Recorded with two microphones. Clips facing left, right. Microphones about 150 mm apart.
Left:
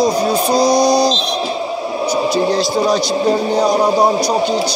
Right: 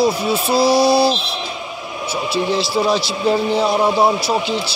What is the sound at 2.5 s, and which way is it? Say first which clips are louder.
Speech: left 3 dB; centre (ahead or behind).